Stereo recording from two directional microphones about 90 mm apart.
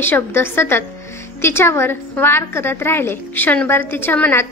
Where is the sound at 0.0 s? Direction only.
25° left (ahead or behind).